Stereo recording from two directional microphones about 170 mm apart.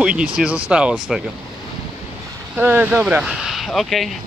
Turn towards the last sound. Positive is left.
turn(degrees=0)  # may be behind; listen again after turning